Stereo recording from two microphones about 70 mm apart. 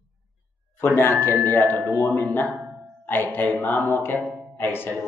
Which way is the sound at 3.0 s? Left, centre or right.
Left.